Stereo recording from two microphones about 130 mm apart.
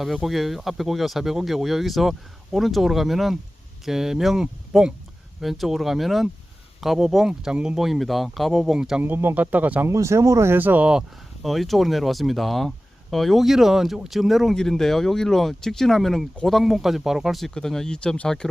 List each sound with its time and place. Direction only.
0.0 s speech: centre (ahead or behind)
9.9 s speech: 25° right (ahead or behind); by 18.4 s 5° left (ahead or behind)